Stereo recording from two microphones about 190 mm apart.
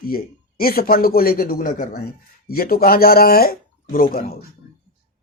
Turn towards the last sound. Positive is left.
turn(degrees=50)  # may be behind; listen again after turning